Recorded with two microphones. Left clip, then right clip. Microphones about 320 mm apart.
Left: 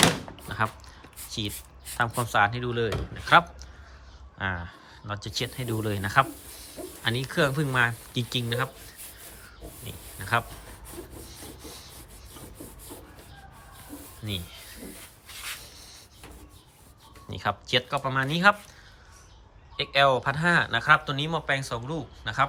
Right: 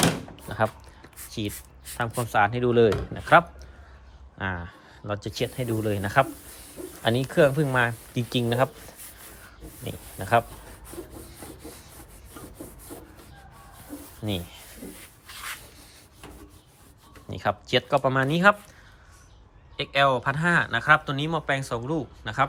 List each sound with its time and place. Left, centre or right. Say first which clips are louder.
0.3 s a sound: right 3 dB; centre
1.2 s speech: even; centre
9.8 s snake: right 5 dB; centre
10.9 s wood: right 3 dB; centre
14.2 s speech: right 4 dB; right
14.9 s rub: right 1 dB; centre
17.2 s speech: right 2 dB; centre
19.7 s speech: even; centre